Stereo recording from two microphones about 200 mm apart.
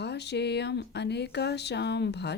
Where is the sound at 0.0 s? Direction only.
55° left (ahead or behind).